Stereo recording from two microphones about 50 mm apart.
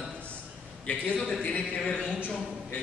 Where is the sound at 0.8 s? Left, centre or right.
Left.